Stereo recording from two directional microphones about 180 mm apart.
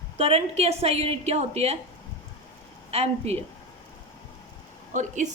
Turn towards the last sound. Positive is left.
turn(degrees=-40)  # may be behind; listen again after turning